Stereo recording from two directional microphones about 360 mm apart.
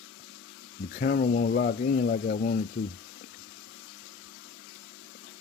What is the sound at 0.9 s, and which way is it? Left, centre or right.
Speech, left.